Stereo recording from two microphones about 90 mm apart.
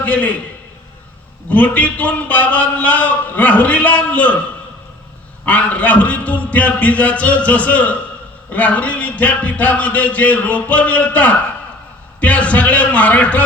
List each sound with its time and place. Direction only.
0.0 s a man's voice: 15° left (ahead or behind)
1.5 s a man's voice: 15° left (ahead or behind)
5.5 s a man's voice: 15° left (ahead or behind)